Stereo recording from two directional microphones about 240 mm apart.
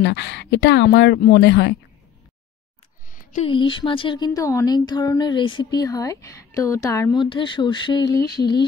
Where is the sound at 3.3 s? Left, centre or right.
Left.